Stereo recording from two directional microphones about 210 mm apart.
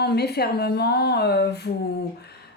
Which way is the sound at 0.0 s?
50° left (ahead or behind).